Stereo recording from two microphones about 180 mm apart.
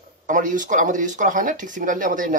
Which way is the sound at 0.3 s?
45° right (ahead or behind).